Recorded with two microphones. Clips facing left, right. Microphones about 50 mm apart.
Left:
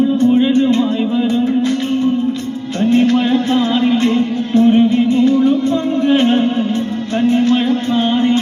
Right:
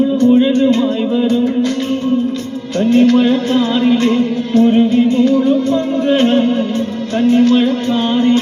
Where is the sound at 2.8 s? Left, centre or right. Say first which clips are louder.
Right 3 dB; left.